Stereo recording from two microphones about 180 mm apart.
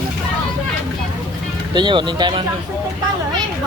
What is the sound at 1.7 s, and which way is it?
Speech, 25° right (ahead or behind).